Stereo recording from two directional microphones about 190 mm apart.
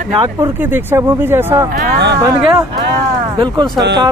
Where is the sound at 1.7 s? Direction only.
60° right (ahead or behind).